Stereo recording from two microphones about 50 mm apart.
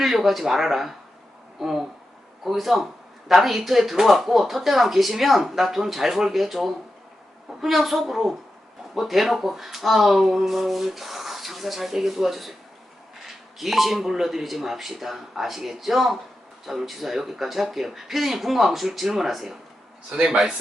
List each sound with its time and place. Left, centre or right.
0.0 s speech: centre
1.5 s a sound: centre
2.4 s speech: centre
20.1 s a man's voice: right